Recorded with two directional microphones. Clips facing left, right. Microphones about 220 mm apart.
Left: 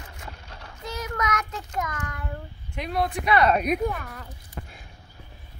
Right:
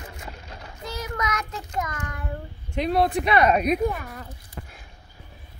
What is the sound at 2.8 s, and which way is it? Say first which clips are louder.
Speech: right 6 dB; 30° right (ahead or behind).